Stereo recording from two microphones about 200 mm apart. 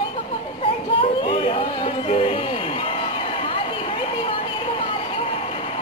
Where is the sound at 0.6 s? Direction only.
25° left (ahead or behind).